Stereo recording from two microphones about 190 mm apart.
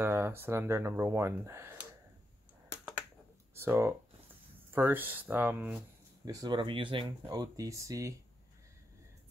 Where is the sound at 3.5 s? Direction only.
10° right (ahead or behind).